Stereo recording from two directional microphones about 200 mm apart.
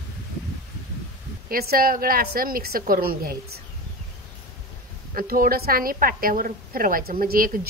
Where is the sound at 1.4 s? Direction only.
50° right (ahead or behind).